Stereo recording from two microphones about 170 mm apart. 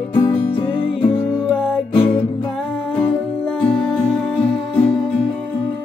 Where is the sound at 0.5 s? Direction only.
30° left (ahead or behind).